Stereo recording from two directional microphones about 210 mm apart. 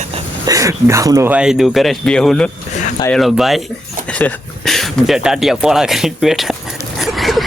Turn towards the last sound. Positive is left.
turn(degrees=0)  # may be behind; listen again after turning